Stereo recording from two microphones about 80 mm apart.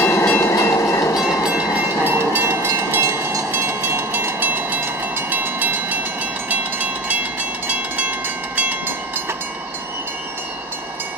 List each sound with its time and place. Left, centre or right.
0.0 s train: left
1.5 s train: centre
2.0 s train: right
7.6 s vehicle: centre
8.5 s train: right